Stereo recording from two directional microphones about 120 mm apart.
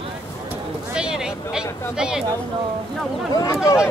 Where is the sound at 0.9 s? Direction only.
5° right (ahead or behind).